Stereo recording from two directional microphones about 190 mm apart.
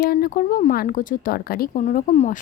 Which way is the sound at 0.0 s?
50° left (ahead or behind).